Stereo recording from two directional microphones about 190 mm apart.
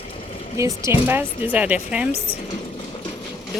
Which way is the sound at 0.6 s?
15° right (ahead or behind).